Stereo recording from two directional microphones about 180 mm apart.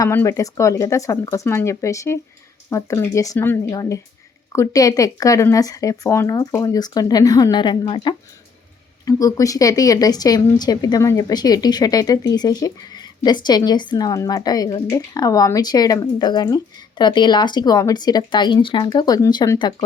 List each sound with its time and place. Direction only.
0.0 s speech: 15° left (ahead or behind)